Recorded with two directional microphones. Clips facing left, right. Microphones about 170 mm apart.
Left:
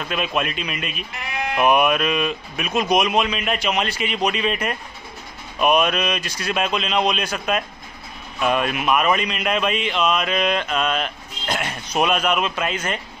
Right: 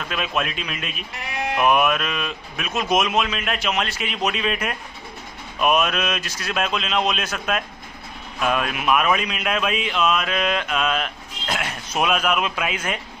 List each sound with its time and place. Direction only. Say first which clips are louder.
0.1 s speech: left 2 dB; centre (ahead or behind)
9.9 s mantra: even; 5° left (ahead or behind)
10.3 s speech: left 2 dB; centre (ahead or behind)